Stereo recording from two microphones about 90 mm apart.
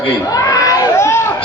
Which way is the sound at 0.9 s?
30° left (ahead or behind).